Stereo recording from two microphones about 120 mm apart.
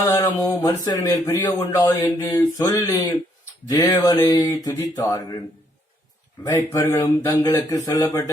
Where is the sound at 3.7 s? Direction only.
35° left (ahead or behind).